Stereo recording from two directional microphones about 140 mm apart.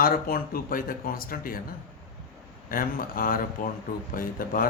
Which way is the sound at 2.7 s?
90° left.